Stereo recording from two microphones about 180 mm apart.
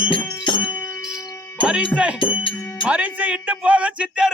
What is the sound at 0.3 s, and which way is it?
Music, 25° left (ahead or behind).